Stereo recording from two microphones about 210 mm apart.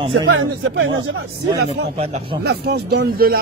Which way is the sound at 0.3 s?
60° right (ahead or behind).